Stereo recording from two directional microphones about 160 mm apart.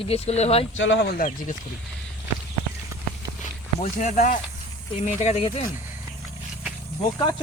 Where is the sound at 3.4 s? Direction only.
50° left (ahead or behind).